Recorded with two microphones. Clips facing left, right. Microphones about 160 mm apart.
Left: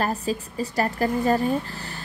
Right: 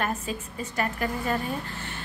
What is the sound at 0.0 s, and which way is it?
A woman's voice, 35° left (ahead or behind).